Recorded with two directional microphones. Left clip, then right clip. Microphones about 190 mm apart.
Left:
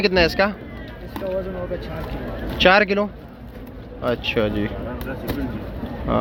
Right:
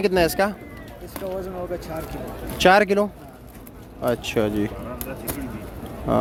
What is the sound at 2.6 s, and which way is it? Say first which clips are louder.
Speech: left 1 dB; 30° right (ahead or behind).